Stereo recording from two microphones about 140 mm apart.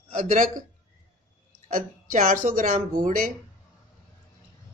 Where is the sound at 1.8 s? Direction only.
75° right (ahead or behind).